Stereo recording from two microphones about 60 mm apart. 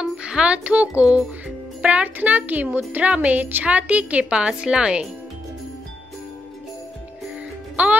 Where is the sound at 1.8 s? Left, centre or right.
Right.